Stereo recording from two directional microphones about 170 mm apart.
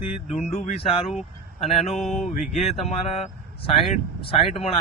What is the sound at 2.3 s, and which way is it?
Speech, 40° left (ahead or behind).